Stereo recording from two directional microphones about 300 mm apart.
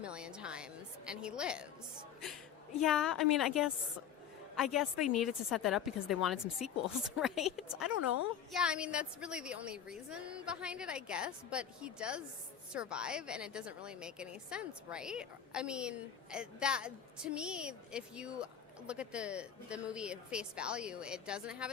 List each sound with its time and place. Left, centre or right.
0.0 s a woman's voice: centre
2.8 s a woman's voice: centre
8.0 s a woman's voice: left
8.5 s a woman's voice: centre